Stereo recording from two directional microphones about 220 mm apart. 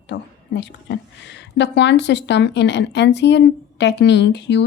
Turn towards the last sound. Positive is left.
turn(degrees=50)  # may be behind; listen again after turning